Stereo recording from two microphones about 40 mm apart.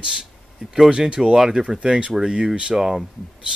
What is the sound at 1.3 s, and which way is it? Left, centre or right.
Speech, centre.